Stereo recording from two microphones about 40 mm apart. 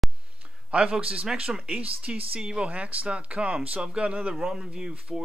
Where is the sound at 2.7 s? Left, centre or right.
Right.